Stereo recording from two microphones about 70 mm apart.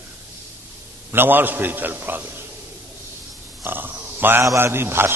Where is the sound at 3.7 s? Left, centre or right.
Right.